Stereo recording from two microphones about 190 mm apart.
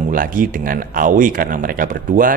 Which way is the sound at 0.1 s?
45° right (ahead or behind).